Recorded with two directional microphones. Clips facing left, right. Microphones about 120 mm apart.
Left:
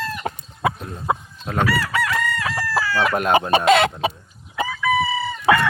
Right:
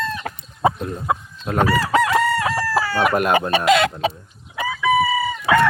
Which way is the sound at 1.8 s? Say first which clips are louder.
Right 6 dB; 35° right (ahead or behind).